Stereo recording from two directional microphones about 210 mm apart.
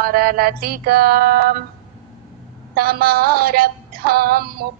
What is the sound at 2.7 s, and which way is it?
Mantra, 45° right (ahead or behind).